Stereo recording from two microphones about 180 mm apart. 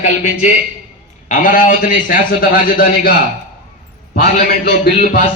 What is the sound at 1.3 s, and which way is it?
A man's voice, 45° left (ahead or behind).